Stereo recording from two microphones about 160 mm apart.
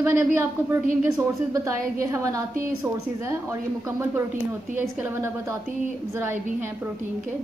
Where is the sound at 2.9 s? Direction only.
5° right (ahead or behind).